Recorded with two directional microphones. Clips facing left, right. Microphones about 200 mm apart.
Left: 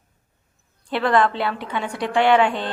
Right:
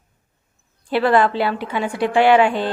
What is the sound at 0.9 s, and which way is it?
A woman's voice, 5° right (ahead or behind).